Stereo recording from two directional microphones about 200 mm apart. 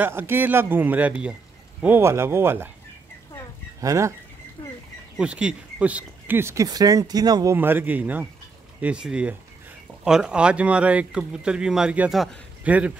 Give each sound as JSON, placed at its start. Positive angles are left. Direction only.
{"t": 0.0, "sound": "speech", "side_deg": -10}
{"t": 3.8, "sound": "speech", "side_deg": -15}
{"t": 4.6, "sound": "a sound", "side_deg": 25}
{"t": 5.1, "sound": "speech", "side_deg": -5}